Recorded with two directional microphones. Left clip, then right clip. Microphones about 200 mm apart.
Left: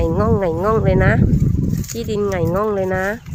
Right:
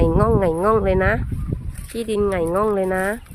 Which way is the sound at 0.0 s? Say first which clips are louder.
Even; centre (ahead or behind).